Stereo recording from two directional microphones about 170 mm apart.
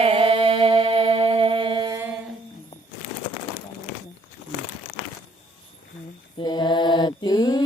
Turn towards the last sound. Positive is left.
turn(degrees=25)  # may be behind; listen again after turning